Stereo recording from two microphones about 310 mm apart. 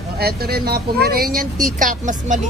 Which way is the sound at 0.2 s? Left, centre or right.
Right.